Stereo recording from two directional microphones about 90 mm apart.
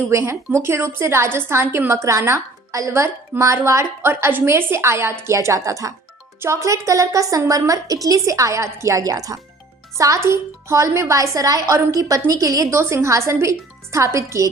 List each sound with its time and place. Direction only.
0.1 s a woman's voice: 35° right (ahead or behind)